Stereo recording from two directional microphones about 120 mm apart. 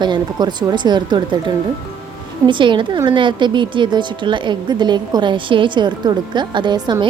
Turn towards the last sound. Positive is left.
turn(degrees=-40)  # may be behind; listen again after turning